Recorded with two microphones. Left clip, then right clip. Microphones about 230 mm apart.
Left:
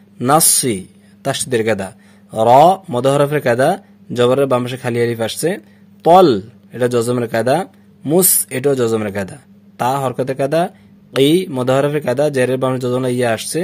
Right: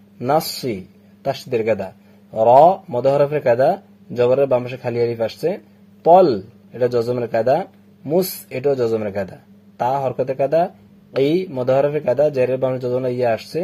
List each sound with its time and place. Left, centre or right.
0.2 s a man's voice: left